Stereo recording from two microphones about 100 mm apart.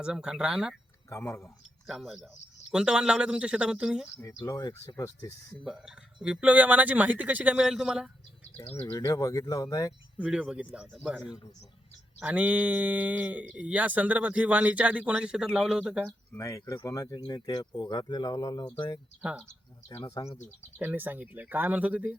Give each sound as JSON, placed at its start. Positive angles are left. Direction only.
{"t": 0.0, "sound": "speech", "side_deg": -10}
{"t": 1.1, "sound": "speech", "side_deg": 25}
{"t": 1.9, "sound": "speech", "side_deg": 0}
{"t": 4.2, "sound": "speech", "side_deg": 30}
{"t": 5.6, "sound": "speech", "side_deg": -5}
{"t": 8.7, "sound": "speech", "side_deg": 25}
{"t": 10.2, "sound": "speech", "side_deg": -10}
{"t": 16.4, "sound": "speech", "side_deg": 30}
{"t": 19.2, "sound": "speech", "side_deg": -10}
{"t": 20.1, "sound": "speech", "side_deg": 35}
{"t": 20.7, "sound": "speech", "side_deg": -20}